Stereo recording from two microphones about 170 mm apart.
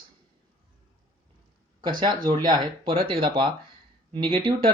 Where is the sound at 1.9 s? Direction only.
25° right (ahead or behind).